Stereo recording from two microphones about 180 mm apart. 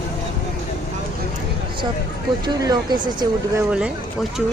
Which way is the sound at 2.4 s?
25° right (ahead or behind).